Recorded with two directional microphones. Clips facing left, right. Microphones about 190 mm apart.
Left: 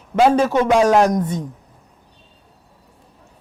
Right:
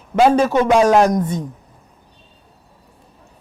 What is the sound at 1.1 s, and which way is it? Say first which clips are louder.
Speech: right 1 dB; 25° right (ahead or behind).